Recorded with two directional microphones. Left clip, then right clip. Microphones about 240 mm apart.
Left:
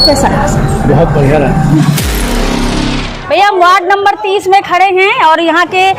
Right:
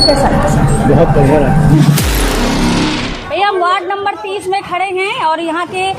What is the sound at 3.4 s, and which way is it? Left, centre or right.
A woman's voice, left.